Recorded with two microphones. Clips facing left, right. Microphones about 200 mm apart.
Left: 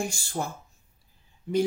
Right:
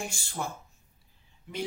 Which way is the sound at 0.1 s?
40° left (ahead or behind).